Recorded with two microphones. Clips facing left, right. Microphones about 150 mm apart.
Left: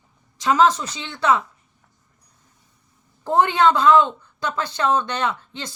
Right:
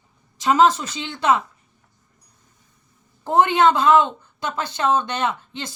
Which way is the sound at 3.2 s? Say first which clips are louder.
Right 1 dB; 15° right (ahead or behind).